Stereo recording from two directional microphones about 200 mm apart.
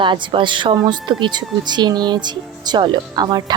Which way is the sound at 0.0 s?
25° right (ahead or behind).